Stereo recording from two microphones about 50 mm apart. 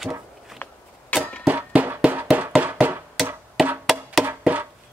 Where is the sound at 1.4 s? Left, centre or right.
Right.